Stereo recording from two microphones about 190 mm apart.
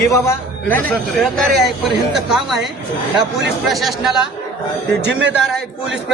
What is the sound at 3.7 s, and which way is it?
Speech, centre (ahead or behind).